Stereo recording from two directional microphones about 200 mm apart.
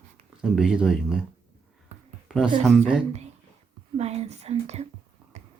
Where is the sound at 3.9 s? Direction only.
30° right (ahead or behind).